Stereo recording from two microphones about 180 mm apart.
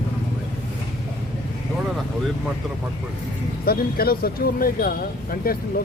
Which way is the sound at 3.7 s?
55° left (ahead or behind).